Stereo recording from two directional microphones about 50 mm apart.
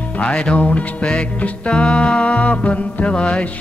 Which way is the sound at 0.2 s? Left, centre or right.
Left.